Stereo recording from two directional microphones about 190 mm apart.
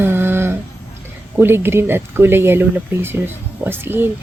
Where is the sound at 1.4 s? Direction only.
10° right (ahead or behind).